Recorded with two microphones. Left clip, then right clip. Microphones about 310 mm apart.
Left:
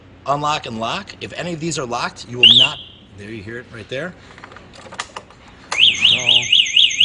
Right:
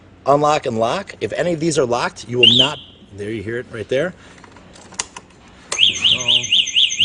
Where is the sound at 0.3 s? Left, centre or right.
Right.